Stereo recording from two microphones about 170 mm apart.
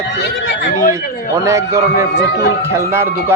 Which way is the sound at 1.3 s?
15° right (ahead or behind).